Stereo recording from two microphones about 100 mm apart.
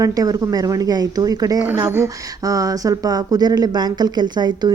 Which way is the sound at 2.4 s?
35° right (ahead or behind).